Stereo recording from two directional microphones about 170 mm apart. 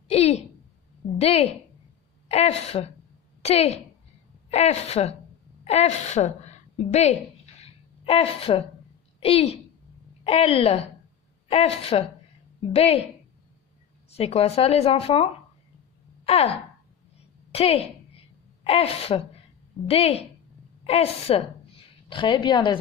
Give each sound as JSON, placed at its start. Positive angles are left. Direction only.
{"t": 0.1, "sound": "a sound", "side_deg": 35}
{"t": 1.1, "sound": "a woman's voice", "side_deg": 40}
{"t": 7.6, "sound": "a sound", "side_deg": 35}
{"t": 9.2, "sound": "speech", "side_deg": 35}
{"t": 14.1, "sound": "speech", "side_deg": 35}
{"t": 17.5, "sound": "a woman's voice", "side_deg": 35}